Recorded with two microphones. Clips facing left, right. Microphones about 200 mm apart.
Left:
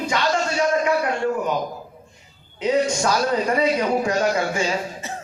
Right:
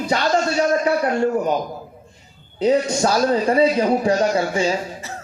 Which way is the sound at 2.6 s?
35° right (ahead or behind).